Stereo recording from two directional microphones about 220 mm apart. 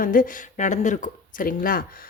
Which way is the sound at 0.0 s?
40° left (ahead or behind).